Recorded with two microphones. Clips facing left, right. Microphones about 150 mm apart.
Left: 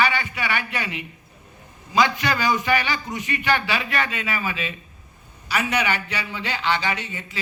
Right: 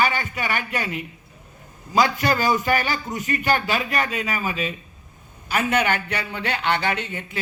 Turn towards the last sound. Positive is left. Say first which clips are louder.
# right 2 dB
turn(degrees=-55)  # may be behind; listen again after turning